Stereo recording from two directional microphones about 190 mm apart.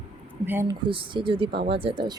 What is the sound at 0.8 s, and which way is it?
Speech, 25° right (ahead or behind).